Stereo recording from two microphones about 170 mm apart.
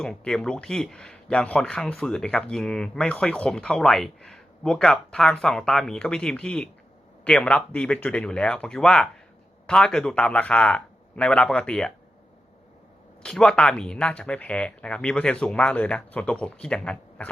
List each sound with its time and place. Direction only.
0.0 s speech: 5° left (ahead or behind)
13.2 s speech: 5° left (ahead or behind)